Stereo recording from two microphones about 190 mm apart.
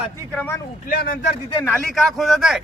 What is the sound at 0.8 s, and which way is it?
Speech, 50° left (ahead or behind).